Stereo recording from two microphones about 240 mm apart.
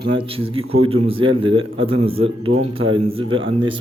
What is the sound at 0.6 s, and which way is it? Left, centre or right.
Speech, right.